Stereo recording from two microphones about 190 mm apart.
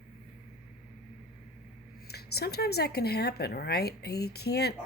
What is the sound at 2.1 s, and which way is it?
Speech, 55° left (ahead or behind).